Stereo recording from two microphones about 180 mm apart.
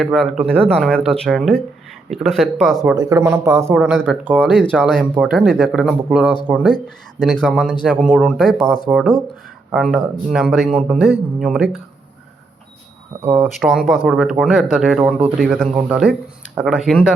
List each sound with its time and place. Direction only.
0.0 s speech: centre (ahead or behind)
2.9 s speech: 20° right (ahead or behind)
3.8 s speech: centre (ahead or behind)
7.2 s speech: 5° left (ahead or behind)
13.2 s speech: 10° right (ahead or behind)
13.5 s speech: centre (ahead or behind)